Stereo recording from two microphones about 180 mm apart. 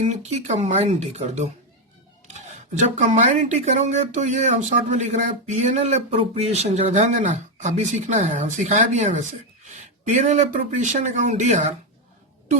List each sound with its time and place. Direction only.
0.0 s speech: 40° right (ahead or behind)